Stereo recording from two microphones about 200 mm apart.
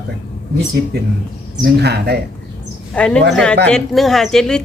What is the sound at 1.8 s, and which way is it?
Speech, 55° right (ahead or behind).